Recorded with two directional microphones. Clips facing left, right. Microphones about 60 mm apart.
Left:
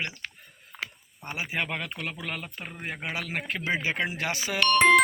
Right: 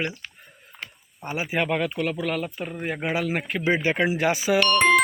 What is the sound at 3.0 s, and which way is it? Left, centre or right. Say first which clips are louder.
Speech: right 7 dB; centre.